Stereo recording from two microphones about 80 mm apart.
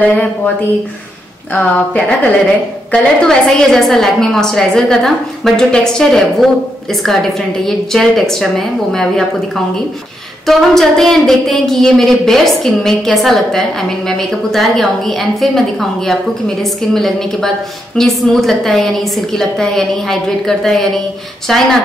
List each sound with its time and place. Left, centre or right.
0.0 s speech: centre
1.6 s a woman's voice: centre
10.4 s a woman's voice: centre